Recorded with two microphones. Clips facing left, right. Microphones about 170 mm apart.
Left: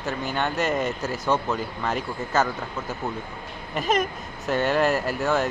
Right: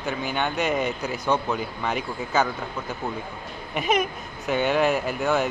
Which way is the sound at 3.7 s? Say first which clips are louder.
Even; centre (ahead or behind).